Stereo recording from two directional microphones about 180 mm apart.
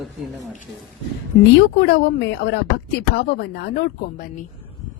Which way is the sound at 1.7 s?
70° left (ahead or behind).